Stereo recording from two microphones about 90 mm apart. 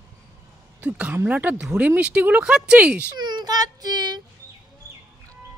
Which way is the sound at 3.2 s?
50° right (ahead or behind).